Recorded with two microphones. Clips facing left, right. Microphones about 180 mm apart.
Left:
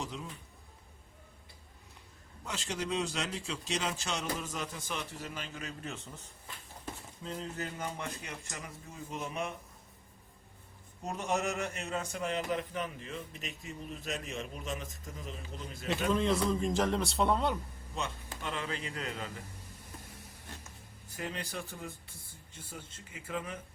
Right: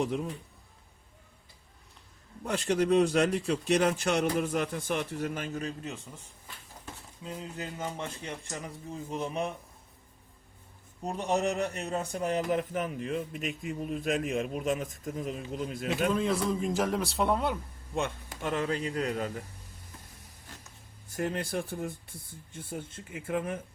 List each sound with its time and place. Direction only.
0.0 s speech: 55° right (ahead or behind)
2.5 s speech: 55° right (ahead or behind)
5.8 s a man's voice: 15° right (ahead or behind)
7.3 s speech: 10° right (ahead or behind); by 9.5 s 35° right (ahead or behind)
11.0 s a man's voice: 35° right (ahead or behind); by 15.3 s 50° right (ahead or behind)
16.0 s a man's voice: 5° right (ahead or behind)
18.4 s a man's voice: 45° right (ahead or behind)
21.1 s a man's voice: 45° right (ahead or behind)